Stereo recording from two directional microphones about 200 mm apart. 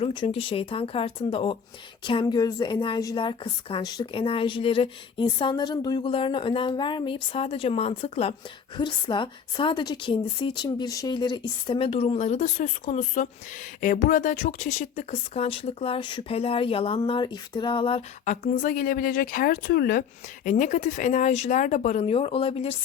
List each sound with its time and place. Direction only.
0.0 s a woman's voice: 25° left (ahead or behind)
18.3 s a woman's voice: 40° left (ahead or behind)